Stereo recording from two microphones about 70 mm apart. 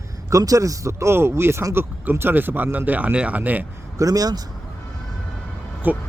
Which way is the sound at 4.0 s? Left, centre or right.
Right.